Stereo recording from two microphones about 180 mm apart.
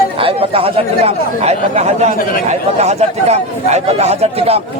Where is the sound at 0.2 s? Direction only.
30° right (ahead or behind).